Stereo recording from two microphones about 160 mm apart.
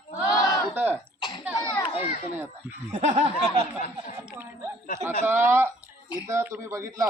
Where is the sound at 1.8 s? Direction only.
40° left (ahead or behind).